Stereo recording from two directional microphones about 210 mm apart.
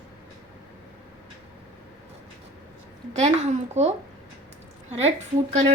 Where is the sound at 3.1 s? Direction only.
30° right (ahead or behind).